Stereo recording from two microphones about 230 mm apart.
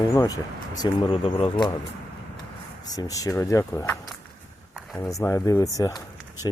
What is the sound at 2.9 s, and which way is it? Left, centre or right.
Speech, centre.